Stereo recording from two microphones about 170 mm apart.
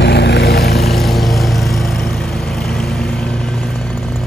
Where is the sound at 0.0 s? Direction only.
85° left; by 0.7 s 70° left (ahead or behind).